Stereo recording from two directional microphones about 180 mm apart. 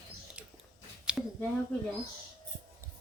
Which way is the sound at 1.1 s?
5° right (ahead or behind).